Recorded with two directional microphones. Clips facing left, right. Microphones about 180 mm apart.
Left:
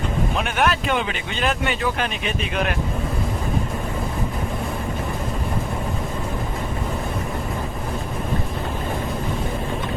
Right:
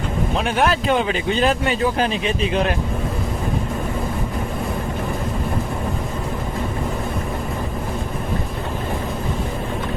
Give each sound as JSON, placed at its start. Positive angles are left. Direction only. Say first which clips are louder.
{"t": 0.3, "sound": "speech", "louder": "right 4 dB", "side_deg": -30}